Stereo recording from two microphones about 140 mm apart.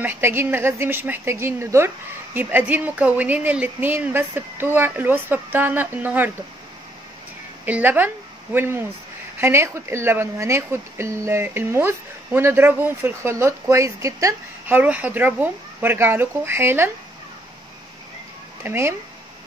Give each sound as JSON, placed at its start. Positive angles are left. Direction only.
{"t": 0.0, "sound": "speech", "side_deg": -15}
{"t": 7.6, "sound": "speech", "side_deg": -10}
{"t": 18.6, "sound": "speech", "side_deg": -15}